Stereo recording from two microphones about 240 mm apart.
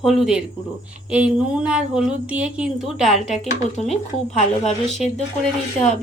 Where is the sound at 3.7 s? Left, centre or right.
Left.